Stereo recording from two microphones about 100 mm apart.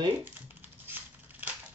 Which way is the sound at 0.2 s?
20° right (ahead or behind).